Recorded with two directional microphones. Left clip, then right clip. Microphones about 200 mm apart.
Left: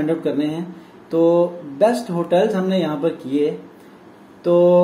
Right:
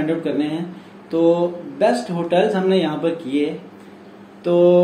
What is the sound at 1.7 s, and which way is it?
Speech, 55° left (ahead or behind).